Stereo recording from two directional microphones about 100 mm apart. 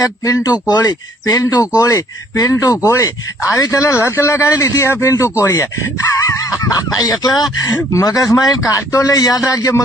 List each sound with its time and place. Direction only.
0.0 s speech: 35° left (ahead or behind)